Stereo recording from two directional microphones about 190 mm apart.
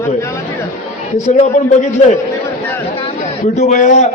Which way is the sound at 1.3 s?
40° left (ahead or behind).